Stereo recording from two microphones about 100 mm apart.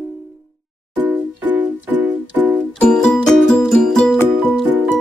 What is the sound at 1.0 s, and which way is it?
Music, 20° right (ahead or behind).